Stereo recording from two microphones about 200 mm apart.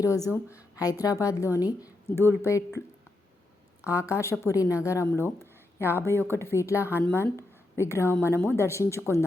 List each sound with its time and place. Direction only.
0.0 s a woman's voice: 15° left (ahead or behind)
3.8 s speech: 15° left (ahead or behind)